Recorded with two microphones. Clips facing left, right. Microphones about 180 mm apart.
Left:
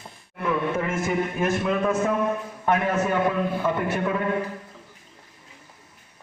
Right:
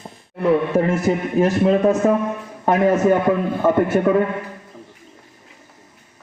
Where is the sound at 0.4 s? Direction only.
35° right (ahead or behind).